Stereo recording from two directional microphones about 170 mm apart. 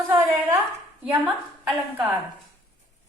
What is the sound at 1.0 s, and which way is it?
A woman's voice, 10° right (ahead or behind).